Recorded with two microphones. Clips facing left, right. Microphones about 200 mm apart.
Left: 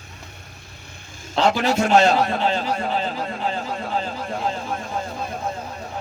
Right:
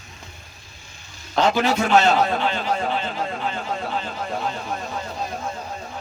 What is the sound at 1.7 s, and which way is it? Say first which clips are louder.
A man's voice: left 3 dB; 40° left (ahead or behind).